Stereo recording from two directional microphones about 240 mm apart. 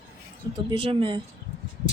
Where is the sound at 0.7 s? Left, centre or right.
Right.